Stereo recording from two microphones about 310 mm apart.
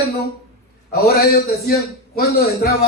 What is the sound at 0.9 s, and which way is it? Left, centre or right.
Speech, left.